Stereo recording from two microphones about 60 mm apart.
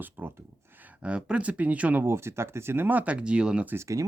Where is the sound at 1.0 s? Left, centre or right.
Centre.